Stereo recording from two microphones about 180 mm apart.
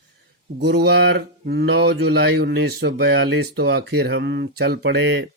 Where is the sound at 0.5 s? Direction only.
70° right (ahead or behind).